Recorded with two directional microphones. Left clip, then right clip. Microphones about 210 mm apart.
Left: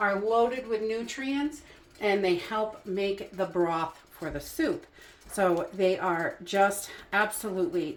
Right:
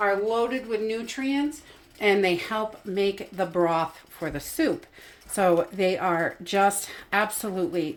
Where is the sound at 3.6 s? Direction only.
50° right (ahead or behind).